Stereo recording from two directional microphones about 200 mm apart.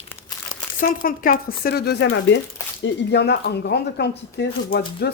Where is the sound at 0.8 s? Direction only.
45° left (ahead or behind).